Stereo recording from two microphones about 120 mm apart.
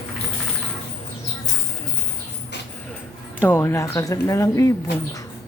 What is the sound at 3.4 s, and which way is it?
Speech, 20° left (ahead or behind).